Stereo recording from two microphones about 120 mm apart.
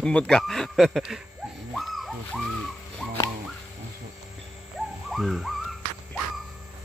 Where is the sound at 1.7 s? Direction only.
Centre (ahead or behind).